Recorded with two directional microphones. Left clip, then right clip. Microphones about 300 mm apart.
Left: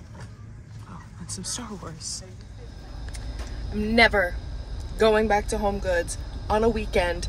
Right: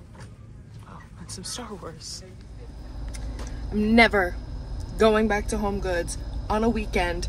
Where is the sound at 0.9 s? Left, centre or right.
Centre.